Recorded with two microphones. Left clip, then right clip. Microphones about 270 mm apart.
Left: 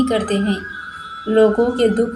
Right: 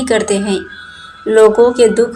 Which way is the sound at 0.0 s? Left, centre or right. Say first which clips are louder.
Right 5 dB; centre.